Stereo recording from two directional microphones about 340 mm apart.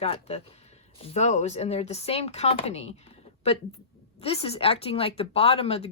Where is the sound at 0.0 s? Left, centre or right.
Centre.